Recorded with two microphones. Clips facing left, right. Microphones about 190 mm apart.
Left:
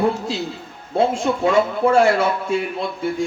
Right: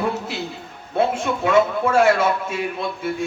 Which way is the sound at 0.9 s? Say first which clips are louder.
Left 2 dB; 25° left (ahead or behind).